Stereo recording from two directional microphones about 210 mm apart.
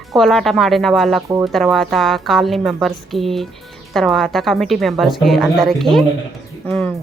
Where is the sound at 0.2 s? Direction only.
Centre (ahead or behind).